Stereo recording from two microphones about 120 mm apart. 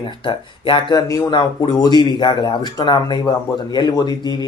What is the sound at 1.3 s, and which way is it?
Speech, 35° left (ahead or behind).